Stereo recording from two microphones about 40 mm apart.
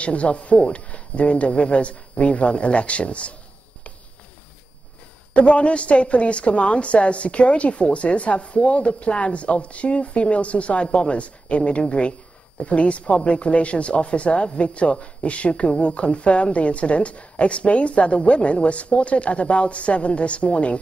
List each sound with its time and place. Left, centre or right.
0.0 s a woman's voice: left
5.3 s a woman's voice: left